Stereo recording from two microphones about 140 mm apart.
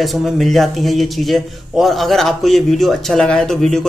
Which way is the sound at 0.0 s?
Centre (ahead or behind).